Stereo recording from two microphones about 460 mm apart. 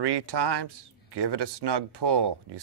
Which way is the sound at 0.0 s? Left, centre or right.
Right.